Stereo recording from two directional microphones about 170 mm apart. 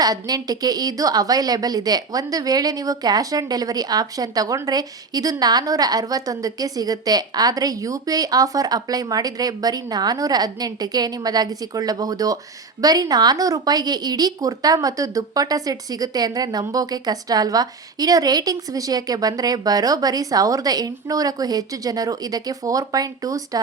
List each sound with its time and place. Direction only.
0.0 s a woman's voice: 20° right (ahead or behind)